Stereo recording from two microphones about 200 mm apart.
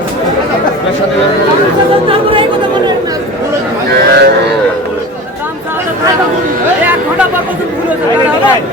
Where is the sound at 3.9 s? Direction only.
55° right (ahead or behind).